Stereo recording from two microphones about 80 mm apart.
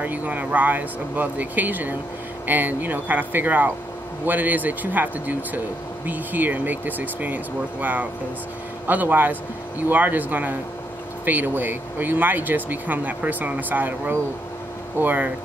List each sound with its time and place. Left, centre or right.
0.0 s speech: right